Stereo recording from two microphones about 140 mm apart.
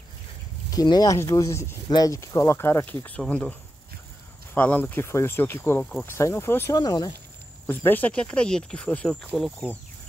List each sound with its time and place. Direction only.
0.7 s speech: 25° left (ahead or behind); by 3.5 s 10° left (ahead or behind)
4.6 s speech: 10° left (ahead or behind)
6.1 s speech: 20° left (ahead or behind)
6.8 s speech: 30° left (ahead or behind)
7.6 s speech: 15° left (ahead or behind)